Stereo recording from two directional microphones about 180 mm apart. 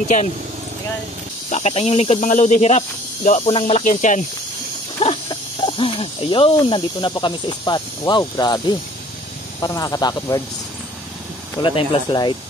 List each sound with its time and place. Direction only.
1.5 s speech: 35° left (ahead or behind)
5.0 s snake: 30° left (ahead or behind)
6.5 s speech: 25° left (ahead or behind)
11.5 s speech: 25° left (ahead or behind)